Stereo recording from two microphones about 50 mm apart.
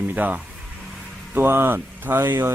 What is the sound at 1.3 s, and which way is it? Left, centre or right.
Speech, right.